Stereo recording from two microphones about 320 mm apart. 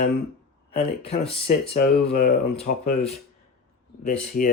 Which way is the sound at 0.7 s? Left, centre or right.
Centre.